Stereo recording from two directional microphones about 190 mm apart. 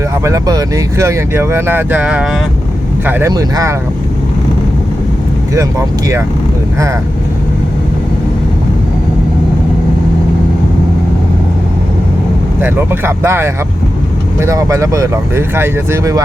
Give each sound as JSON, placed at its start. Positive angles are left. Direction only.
{"t": 0.3, "sound": "speech", "side_deg": -20}
{"t": 12.5, "sound": "speech", "side_deg": -10}